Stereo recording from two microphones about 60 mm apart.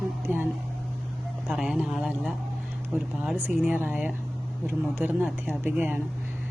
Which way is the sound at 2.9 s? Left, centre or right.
Right.